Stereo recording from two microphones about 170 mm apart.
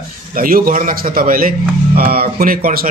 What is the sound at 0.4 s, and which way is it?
A man's voice, 55° right (ahead or behind).